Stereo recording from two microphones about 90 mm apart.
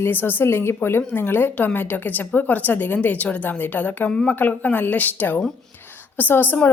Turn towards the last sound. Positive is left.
turn(degrees=20)  # may be behind; listen again after turning